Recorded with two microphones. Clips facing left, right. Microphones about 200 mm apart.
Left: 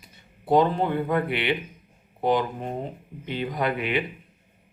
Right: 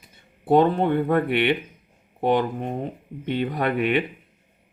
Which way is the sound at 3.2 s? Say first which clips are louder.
Right 3 dB; 60° right (ahead or behind).